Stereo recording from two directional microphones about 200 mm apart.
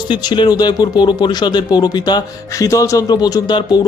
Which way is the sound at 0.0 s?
20° left (ahead or behind).